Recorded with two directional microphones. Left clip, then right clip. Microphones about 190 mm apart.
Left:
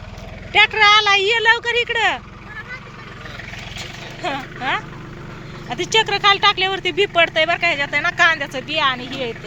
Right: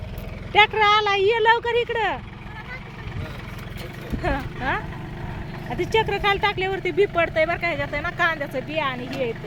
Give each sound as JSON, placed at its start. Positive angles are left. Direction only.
{"t": 0.5, "sound": "speech", "side_deg": -15}
{"t": 4.2, "sound": "speech", "side_deg": -20}
{"t": 5.7, "sound": "speech", "side_deg": -5}